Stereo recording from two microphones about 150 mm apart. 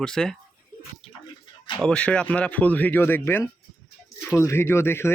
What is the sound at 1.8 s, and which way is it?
Speech, 5° left (ahead or behind).